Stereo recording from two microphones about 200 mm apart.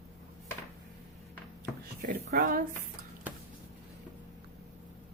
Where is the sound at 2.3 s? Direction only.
45° right (ahead or behind).